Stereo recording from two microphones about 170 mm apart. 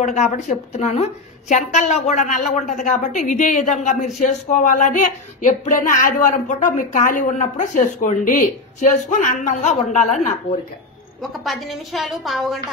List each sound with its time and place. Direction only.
0.0 s a woman's voice: 45° left (ahead or behind)
11.4 s a woman's voice: centre (ahead or behind)